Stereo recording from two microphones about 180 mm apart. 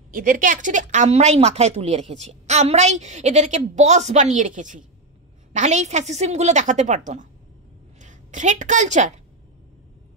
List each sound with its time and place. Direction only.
0.1 s a woman's voice: 50° right (ahead or behind)